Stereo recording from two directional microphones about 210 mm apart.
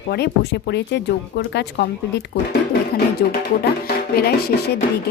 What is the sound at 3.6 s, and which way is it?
Music, 50° left (ahead or behind).